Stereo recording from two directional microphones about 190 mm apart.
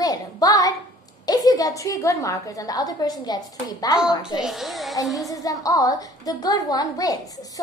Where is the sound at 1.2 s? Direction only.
20° left (ahead or behind).